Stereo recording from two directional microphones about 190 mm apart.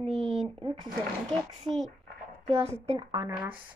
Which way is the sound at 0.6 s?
25° right (ahead or behind).